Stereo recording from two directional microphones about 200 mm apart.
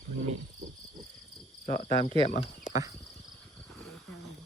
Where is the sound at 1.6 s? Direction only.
45° left (ahead or behind).